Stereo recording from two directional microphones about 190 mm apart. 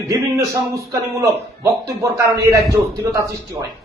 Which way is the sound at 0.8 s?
15° right (ahead or behind).